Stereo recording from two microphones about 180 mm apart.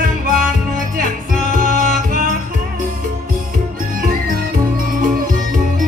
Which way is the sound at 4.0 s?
50° right (ahead or behind).